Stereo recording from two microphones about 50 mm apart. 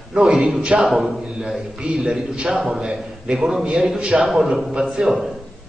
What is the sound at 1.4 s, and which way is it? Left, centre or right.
A man's voice, centre.